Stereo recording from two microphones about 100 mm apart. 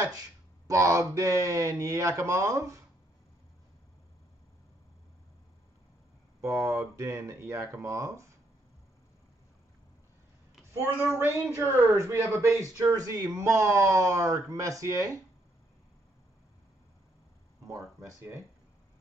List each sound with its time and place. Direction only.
0.7 s speech: 30° right (ahead or behind)
6.4 s speech: 30° right (ahead or behind)
11.1 s speech: 25° right (ahead or behind)
17.6 s speech: 30° right (ahead or behind)